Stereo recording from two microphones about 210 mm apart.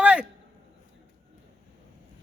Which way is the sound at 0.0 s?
5° right (ahead or behind).